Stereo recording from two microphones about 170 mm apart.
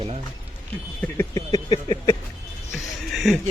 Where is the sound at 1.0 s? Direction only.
15° left (ahead or behind).